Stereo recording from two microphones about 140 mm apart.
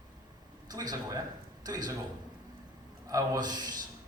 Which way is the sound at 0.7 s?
30° right (ahead or behind).